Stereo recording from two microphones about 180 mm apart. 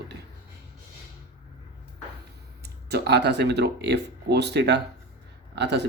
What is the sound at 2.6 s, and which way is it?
Speech, 65° right (ahead or behind).